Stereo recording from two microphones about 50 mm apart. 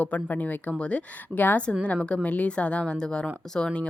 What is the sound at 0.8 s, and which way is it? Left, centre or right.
Speech, left.